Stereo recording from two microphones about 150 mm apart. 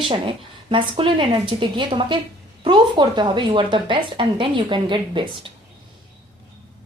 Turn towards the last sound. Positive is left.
turn(degrees=-30)  # may be behind; listen again after turning